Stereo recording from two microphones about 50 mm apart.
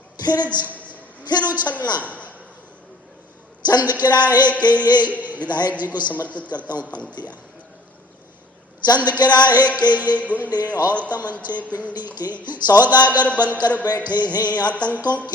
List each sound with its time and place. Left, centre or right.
0.4 s speech: right
2.0 s a sound: left
3.8 s a man's voice: right
6.2 s a man's voice: left
6.6 s speech: right
9.0 s speech: right
14.1 s music: right
14.8 s speech: right